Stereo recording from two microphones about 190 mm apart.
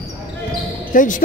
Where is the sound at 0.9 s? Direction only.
45° left (ahead or behind).